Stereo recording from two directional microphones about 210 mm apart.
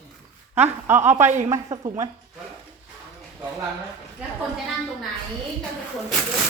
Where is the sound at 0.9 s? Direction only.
10° right (ahead or behind).